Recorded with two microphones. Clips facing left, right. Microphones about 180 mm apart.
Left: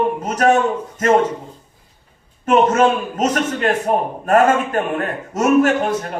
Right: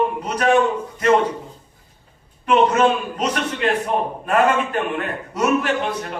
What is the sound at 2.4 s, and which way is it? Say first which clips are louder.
A man's voice: left 2 dB; 45° left (ahead or behind).